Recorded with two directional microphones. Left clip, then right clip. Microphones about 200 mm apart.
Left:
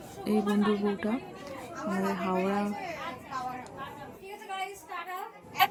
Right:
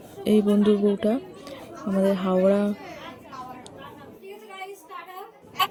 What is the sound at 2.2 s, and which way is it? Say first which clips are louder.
Speech: right 8 dB; 30° right (ahead or behind).